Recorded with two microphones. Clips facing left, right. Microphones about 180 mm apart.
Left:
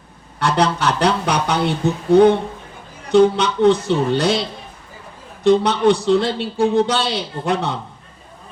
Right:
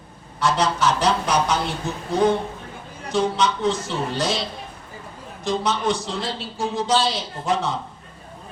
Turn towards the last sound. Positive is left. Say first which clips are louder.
# left 3 dB
turn(degrees=65)  # may be behind; listen again after turning